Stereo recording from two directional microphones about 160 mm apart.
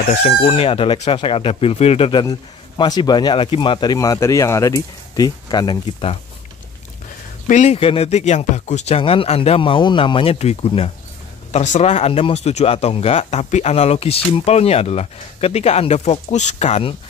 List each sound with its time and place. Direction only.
0.2 s speech: 35° left (ahead or behind)
7.4 s speech: 45° left (ahead or behind)